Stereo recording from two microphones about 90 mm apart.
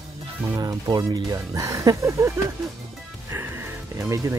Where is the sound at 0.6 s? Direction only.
50° right (ahead or behind).